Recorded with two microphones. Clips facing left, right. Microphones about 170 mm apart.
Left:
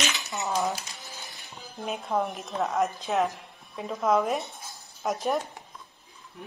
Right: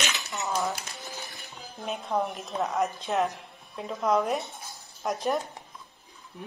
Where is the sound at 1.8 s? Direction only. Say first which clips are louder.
Left 1 dB; centre (ahead or behind).